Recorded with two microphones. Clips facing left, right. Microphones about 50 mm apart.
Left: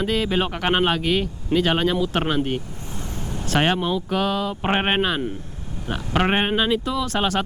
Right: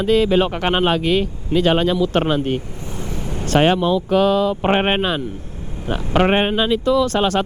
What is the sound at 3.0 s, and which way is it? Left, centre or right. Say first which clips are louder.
Vehicle: right 4 dB; right.